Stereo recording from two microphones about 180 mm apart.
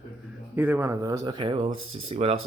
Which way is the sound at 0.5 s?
10° right (ahead or behind).